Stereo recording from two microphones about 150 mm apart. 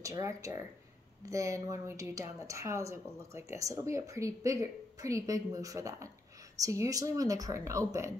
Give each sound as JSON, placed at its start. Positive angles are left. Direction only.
{"t": 0.0, "sound": "speech", "side_deg": -20}